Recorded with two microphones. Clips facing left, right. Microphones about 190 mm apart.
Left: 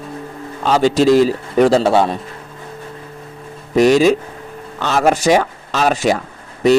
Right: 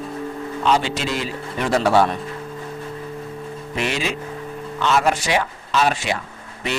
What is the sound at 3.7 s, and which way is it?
Speech, 40° left (ahead or behind).